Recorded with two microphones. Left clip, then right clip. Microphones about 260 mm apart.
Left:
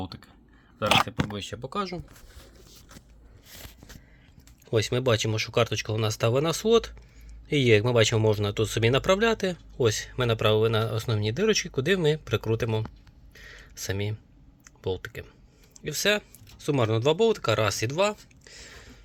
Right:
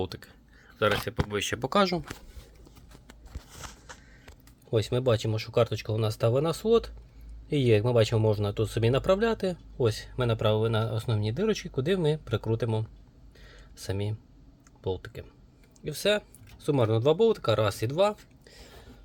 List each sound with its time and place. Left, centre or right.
0.0 s speech: right
1.4 s speech: right
4.7 s speech: centre
13.3 s a sound: centre
14.8 s speech: centre